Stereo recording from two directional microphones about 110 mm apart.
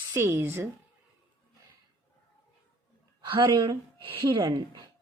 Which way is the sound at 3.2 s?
45° right (ahead or behind).